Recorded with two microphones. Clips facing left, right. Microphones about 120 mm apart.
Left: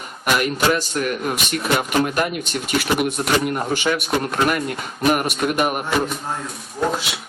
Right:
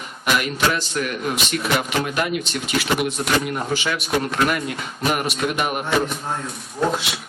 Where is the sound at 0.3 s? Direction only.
45° left (ahead or behind).